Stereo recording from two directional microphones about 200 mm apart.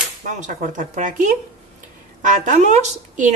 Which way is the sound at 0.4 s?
40° right (ahead or behind).